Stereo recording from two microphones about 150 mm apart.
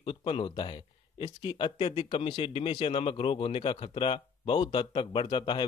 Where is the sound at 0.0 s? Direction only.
35° left (ahead or behind).